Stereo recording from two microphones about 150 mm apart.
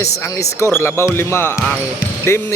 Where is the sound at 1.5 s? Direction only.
5° left (ahead or behind).